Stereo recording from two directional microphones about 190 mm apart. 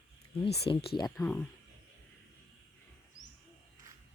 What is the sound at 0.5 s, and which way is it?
Speech, 30° left (ahead or behind).